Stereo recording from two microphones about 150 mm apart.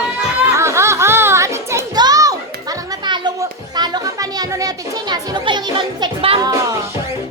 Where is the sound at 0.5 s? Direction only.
20° right (ahead or behind).